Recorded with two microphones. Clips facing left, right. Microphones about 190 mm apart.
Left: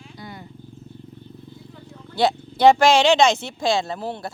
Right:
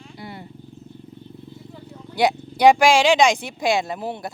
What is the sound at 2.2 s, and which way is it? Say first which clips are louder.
Speech: even; 15° right (ahead or behind).